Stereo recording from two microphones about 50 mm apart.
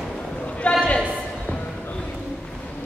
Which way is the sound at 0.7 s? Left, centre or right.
Left.